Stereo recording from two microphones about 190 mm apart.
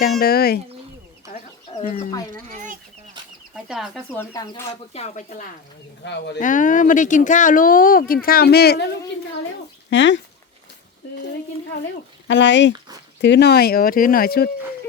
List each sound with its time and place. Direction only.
0.2 s speech: 50° left (ahead or behind)
1.3 s chicken: 40° left (ahead or behind)
3.5 s speech: centre (ahead or behind)
4.2 s speech: 15° left (ahead or behind)
4.9 s speech: 35° left (ahead or behind)
6.1 s speech: 65° left (ahead or behind)
6.4 s speech: 45° left (ahead or behind)
9.9 s speech: 70° left (ahead or behind)
12.3 s speech: 70° left (ahead or behind); by 14.5 s 55° left (ahead or behind)